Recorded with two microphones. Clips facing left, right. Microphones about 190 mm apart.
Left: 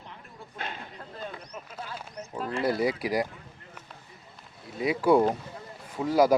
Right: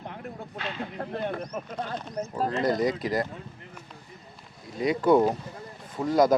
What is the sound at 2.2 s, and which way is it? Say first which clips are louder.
Speech: right 12 dB; 45° right (ahead or behind).